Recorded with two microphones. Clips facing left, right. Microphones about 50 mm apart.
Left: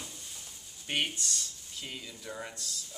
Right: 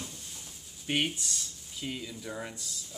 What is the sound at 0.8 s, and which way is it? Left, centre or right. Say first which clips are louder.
Speech: right 2 dB; centre.